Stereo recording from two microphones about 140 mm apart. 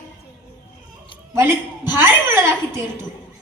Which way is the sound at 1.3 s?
15° right (ahead or behind).